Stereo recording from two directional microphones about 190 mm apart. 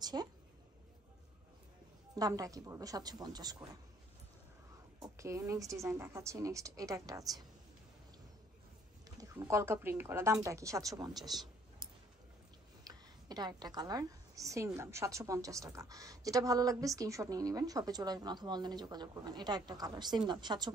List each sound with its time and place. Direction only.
0.0 s a sound: 20° right (ahead or behind)
2.1 s a woman's voice: 20° right (ahead or behind)
5.0 s a woman's voice: 15° right (ahead or behind)
9.2 s a woman's voice: 15° right (ahead or behind)
11.2 s a sound: centre (ahead or behind)
12.8 s a woman's voice: 20° right (ahead or behind)